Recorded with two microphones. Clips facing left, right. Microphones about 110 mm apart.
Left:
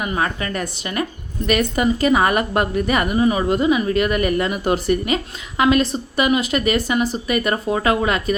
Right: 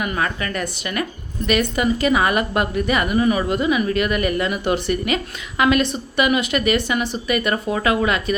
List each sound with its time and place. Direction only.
0.0 s speech: 30° left (ahead or behind)
3.2 s speech: 30° left (ahead or behind)